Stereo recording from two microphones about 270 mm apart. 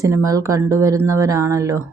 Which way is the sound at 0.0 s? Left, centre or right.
Centre.